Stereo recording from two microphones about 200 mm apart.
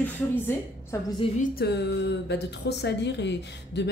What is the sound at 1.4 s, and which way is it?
A woman's voice, 55° left (ahead or behind).